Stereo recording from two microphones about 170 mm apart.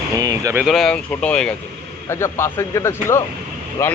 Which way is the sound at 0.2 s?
20° right (ahead or behind).